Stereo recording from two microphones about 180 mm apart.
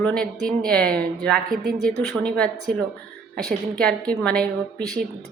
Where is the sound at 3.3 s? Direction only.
5° left (ahead or behind).